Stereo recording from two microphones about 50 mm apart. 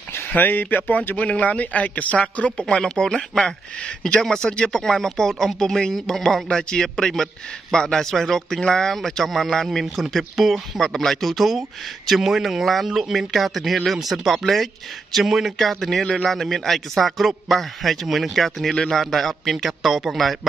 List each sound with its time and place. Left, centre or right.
0.3 s a man's voice: left
2.6 s a man's voice: centre